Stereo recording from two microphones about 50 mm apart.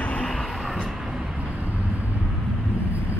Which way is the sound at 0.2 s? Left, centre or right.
Centre.